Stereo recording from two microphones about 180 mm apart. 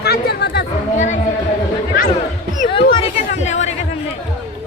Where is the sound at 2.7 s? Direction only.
30° left (ahead or behind).